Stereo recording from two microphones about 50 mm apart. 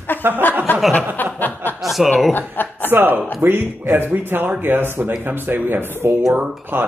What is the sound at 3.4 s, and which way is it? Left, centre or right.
A man's voice, right.